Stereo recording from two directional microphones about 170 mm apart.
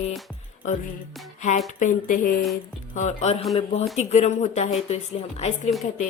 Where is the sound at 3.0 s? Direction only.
40° left (ahead or behind).